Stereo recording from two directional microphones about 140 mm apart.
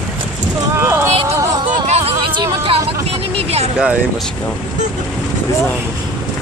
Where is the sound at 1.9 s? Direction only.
40° right (ahead or behind).